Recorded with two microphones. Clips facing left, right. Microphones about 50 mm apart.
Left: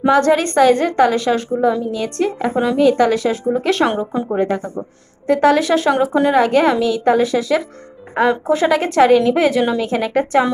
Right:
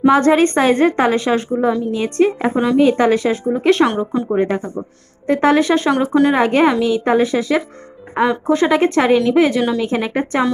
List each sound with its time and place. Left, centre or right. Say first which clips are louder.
0.1 s a woman's voice: left 2 dB; centre
2.5 s a woman's voice: right 2 dB; centre
2.8 s a woman's voice: even; right; by 4.4 s centre
4.4 s a woman's voice: right 1 dB; centre
6.3 s a woman's voice: even; centre
8.1 s a woman's voice: even; centre